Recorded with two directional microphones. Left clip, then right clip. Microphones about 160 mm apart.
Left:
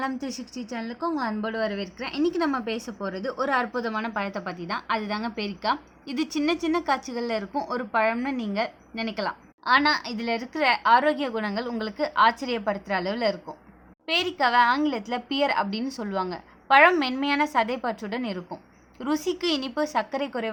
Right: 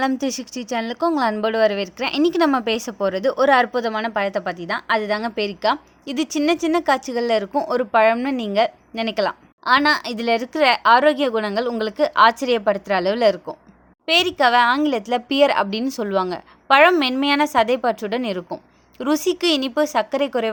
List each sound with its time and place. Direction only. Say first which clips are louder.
0.0 s speech: right 9 dB; 70° right (ahead or behind); by 20.5 s 45° right (ahead or behind)